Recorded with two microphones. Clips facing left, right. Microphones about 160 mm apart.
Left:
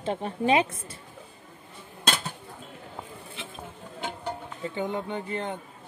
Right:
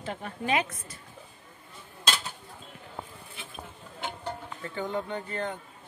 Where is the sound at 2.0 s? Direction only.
55° left (ahead or behind).